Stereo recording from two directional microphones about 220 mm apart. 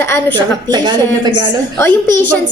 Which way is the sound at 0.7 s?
20° right (ahead or behind).